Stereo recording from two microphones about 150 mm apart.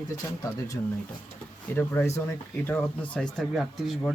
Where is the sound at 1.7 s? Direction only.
15° left (ahead or behind).